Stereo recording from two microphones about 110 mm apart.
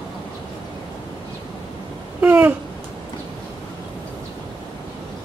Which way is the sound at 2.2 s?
15° right (ahead or behind).